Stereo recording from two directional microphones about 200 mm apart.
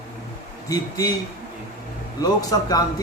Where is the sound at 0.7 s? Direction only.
20° left (ahead or behind).